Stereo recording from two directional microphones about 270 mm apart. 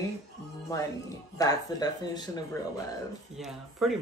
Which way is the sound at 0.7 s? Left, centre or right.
Centre.